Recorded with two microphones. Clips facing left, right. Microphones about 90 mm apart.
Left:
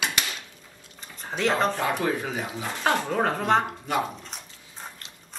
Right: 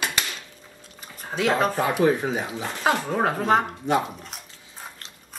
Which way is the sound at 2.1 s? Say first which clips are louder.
Right 5 dB; 25° right (ahead or behind).